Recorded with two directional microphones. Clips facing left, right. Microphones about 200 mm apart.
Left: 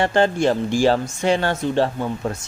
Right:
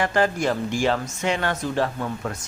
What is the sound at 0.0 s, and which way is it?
Speech, 30° left (ahead or behind).